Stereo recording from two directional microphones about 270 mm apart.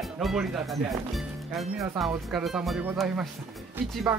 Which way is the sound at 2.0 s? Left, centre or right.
Centre.